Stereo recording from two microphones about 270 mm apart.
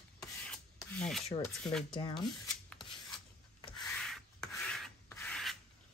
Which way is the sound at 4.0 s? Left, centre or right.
Centre.